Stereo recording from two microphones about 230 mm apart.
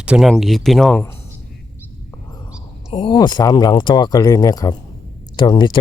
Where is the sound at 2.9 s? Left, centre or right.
Left.